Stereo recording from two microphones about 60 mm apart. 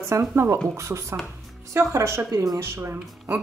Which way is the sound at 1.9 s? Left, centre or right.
Right.